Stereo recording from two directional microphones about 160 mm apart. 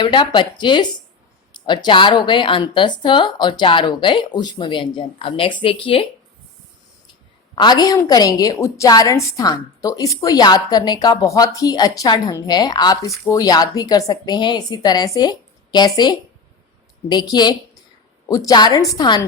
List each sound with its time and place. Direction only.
0.0 s a woman's voice: 30° left (ahead or behind)
7.5 s a woman's voice: 25° left (ahead or behind)